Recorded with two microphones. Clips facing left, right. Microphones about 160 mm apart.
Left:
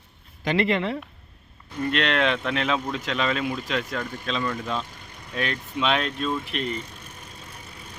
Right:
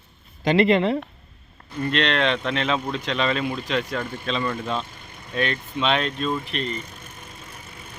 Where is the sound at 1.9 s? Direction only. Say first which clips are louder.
Right 1 dB; 5° left (ahead or behind).